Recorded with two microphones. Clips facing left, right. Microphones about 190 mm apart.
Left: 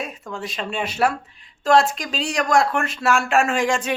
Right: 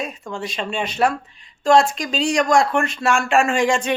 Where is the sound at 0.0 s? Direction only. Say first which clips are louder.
Right 2 dB; centre (ahead or behind).